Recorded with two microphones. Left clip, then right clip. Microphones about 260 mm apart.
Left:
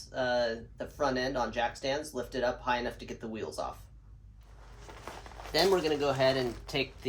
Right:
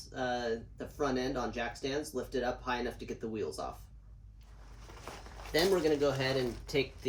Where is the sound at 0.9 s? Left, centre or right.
Left.